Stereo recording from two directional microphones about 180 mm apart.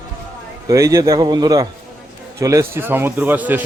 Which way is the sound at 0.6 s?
20° right (ahead or behind).